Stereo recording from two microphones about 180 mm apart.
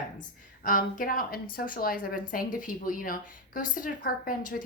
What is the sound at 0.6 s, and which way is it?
A woman's voice, 50° left (ahead or behind).